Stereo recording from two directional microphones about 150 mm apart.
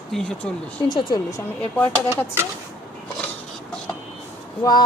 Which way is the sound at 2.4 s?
15° right (ahead or behind).